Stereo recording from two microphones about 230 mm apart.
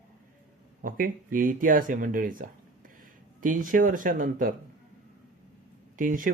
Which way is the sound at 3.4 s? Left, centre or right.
Right.